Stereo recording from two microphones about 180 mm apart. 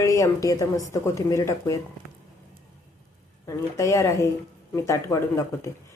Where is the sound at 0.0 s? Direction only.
15° left (ahead or behind).